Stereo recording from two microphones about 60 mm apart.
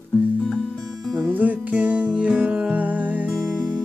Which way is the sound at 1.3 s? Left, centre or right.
Right.